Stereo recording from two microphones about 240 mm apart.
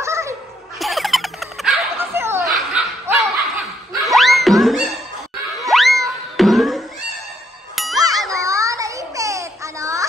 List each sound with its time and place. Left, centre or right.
0.0 s music: centre
0.7 s dog: centre
2.5 s laughter: centre
4.0 s music: centre
7.9 s a sound: centre